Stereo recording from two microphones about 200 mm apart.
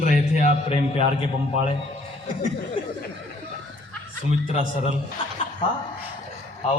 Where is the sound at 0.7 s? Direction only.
25° left (ahead or behind).